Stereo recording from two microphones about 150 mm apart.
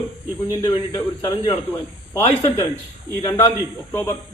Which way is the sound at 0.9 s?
25° left (ahead or behind).